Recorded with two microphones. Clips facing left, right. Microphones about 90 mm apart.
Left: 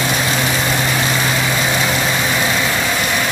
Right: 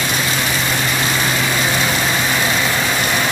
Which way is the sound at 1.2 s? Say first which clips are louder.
Left 1 dB; 5° left (ahead or behind).